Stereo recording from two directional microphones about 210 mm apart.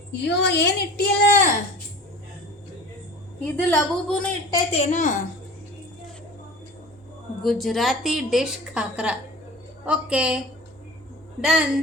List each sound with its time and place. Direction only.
0.1 s a woman's voice: 55° left (ahead or behind)
3.4 s a woman's voice: 10° left (ahead or behind)
4.5 s a child's voice: 30° left (ahead or behind)
7.4 s a woman's voice: centre (ahead or behind)